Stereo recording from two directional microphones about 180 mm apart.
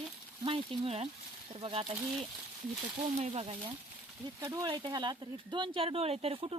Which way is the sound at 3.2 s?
35° right (ahead or behind).